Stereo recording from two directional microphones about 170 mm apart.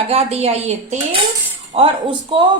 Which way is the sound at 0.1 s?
35° right (ahead or behind).